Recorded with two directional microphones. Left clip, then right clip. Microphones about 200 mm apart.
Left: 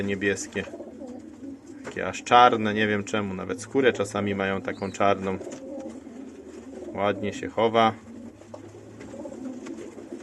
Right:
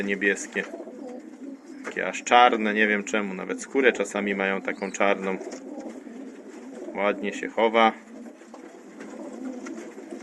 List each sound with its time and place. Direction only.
0.0 s speech: 20° left (ahead or behind)
2.0 s speech: 20° left (ahead or behind)
6.9 s speech: 20° left (ahead or behind)